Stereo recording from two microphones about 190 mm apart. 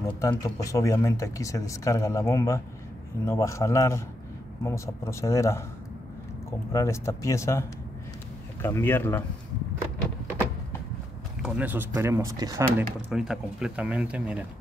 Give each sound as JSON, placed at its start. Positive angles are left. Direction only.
{"t": 0.0, "sound": "speech", "side_deg": 15}
{"t": 6.7, "sound": "speech", "side_deg": 15}
{"t": 8.6, "sound": "speech", "side_deg": 10}
{"t": 11.4, "sound": "speech", "side_deg": -10}
{"t": 13.1, "sound": "speech", "side_deg": -5}